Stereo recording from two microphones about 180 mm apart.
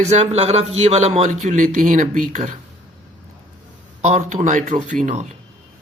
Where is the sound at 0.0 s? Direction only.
35° right (ahead or behind).